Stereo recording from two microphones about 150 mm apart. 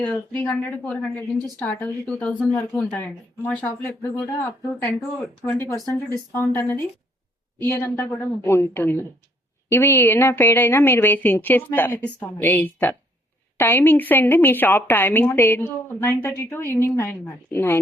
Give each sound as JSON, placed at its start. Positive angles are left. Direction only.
{"t": 0.0, "sound": "a woman's voice", "side_deg": 10}